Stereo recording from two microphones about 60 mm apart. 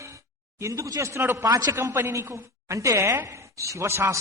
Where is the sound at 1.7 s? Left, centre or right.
Right.